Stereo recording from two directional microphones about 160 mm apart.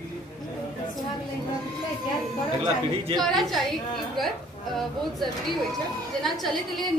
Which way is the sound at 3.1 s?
Centre (ahead or behind).